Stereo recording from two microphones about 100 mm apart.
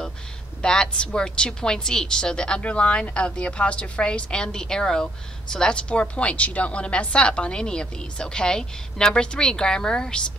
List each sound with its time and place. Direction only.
0.6 s a woman's voice: 10° left (ahead or behind)